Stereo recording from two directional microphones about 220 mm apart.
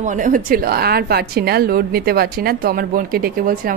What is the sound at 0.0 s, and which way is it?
A woman's voice, 35° right (ahead or behind).